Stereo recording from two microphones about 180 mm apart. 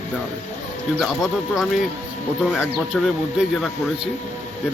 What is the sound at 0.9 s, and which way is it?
Speech, 5° right (ahead or behind).